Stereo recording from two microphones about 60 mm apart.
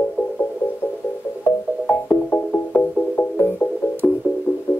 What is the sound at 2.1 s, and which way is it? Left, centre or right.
Music, left.